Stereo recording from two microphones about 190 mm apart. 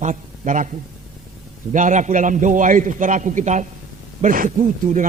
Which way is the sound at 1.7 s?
40° right (ahead or behind).